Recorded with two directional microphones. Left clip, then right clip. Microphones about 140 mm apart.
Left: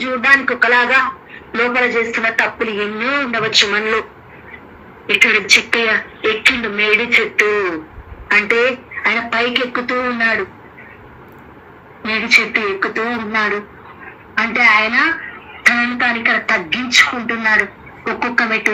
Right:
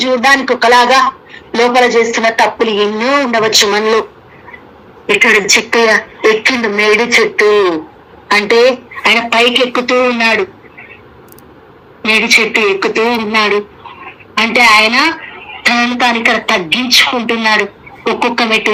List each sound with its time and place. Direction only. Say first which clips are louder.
0.0 s a woman's voice: right 3 dB; 45° right (ahead or behind)
5.0 s a woman's voice: right 4 dB; 30° right (ahead or behind)
5.8 s a woman's voice: right 7 dB; 45° right (ahead or behind)
12.0 s a woman's voice: right 5 dB; 40° right (ahead or behind)